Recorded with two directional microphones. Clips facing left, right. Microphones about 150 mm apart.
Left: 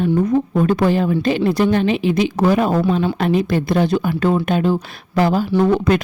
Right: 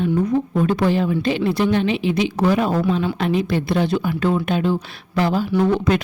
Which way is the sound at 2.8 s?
30° left (ahead or behind).